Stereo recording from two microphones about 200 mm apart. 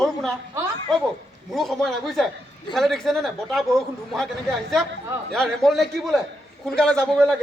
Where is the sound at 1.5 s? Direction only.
Centre (ahead or behind).